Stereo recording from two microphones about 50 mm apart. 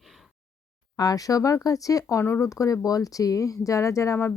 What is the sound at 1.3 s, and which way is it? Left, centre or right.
Speech, left.